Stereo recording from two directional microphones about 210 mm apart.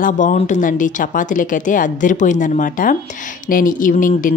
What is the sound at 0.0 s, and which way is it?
Speech, 35° left (ahead or behind).